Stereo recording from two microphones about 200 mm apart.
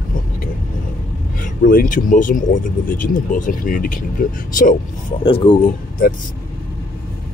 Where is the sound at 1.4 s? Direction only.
45° left (ahead or behind).